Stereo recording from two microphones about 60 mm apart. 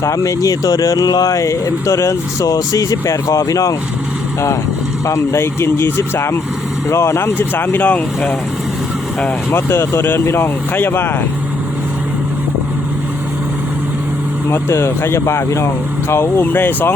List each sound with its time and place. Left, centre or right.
0.0 s speech: left
5.0 s speech: left
7.3 s speech: left
9.5 s speech: left
10.8 s speech: left
14.7 s speech: left
16.5 s speech: left